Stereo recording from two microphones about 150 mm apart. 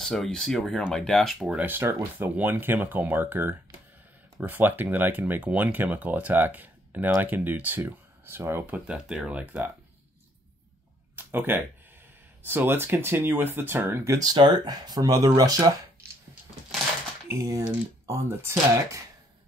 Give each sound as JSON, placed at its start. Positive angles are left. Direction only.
{"t": 0.0, "sound": "speech", "side_deg": 0}
{"t": 11.1, "sound": "a sound", "side_deg": -15}
{"t": 12.4, "sound": "speech", "side_deg": -15}
{"t": 17.3, "sound": "speech", "side_deg": -20}